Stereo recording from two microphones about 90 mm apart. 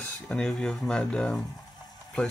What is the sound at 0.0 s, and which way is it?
Speech, 10° left (ahead or behind).